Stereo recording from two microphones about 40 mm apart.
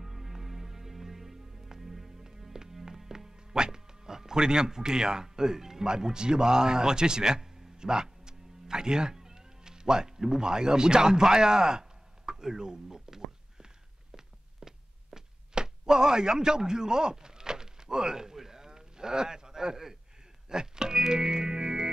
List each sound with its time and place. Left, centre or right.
0.0 s music: centre
14.6 s a sound: centre
20.4 s music: centre